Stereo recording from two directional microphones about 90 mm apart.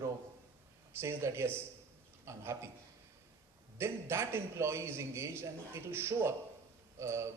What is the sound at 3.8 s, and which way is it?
A man's voice, 30° right (ahead or behind).